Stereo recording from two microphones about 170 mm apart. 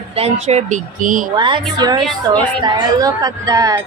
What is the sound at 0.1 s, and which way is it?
Speech, 40° right (ahead or behind).